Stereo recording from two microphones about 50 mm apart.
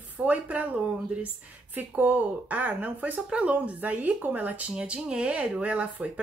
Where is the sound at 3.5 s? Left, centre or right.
Right.